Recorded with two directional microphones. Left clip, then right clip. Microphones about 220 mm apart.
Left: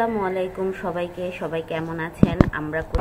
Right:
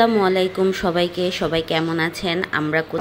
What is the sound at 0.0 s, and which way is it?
Speech, 40° right (ahead or behind).